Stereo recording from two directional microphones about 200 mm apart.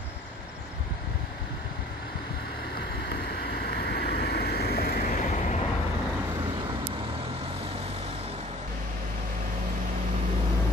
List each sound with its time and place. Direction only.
3.6 s vehicle: 55° left (ahead or behind); by 5.6 s 35° left (ahead or behind)